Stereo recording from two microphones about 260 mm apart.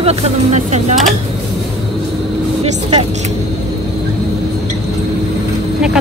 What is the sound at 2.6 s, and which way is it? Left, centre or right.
Speech, right.